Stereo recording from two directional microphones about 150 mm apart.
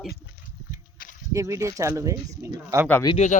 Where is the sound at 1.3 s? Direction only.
20° right (ahead or behind).